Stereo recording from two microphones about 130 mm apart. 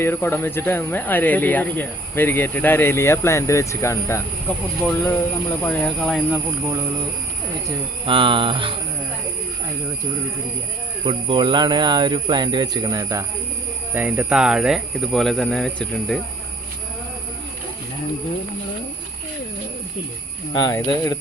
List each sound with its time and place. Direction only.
0.0 s speech: 15° left (ahead or behind)
6.0 s speech: centre (ahead or behind)
6.3 s speech: 20° right (ahead or behind)
8.0 s speech: 40° right (ahead or behind)
11.0 s speech: 40° right (ahead or behind)
13.9 s speech: 10° right (ahead or behind)
20.5 s speech: 30° left (ahead or behind)